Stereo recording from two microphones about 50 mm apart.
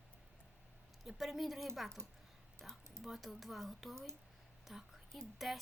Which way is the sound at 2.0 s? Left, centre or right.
Right.